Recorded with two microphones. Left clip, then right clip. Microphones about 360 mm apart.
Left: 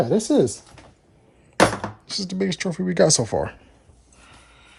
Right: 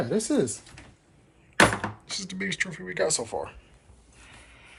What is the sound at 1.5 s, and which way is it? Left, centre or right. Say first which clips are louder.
Chopping: left 2 dB; centre.